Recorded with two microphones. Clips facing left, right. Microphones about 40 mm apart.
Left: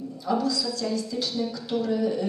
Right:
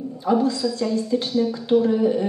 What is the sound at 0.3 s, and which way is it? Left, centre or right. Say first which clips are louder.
A woman's voice: right 6 dB; right.